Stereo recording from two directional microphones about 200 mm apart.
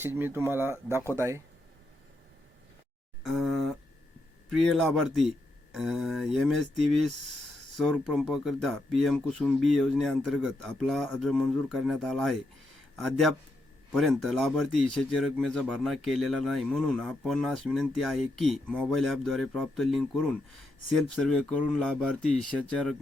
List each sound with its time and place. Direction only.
0.0 s speech: 10° right (ahead or behind)
3.2 s speech: centre (ahead or behind)